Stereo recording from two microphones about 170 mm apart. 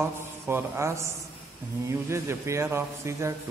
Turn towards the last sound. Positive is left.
turn(degrees=-15)  # may be behind; listen again after turning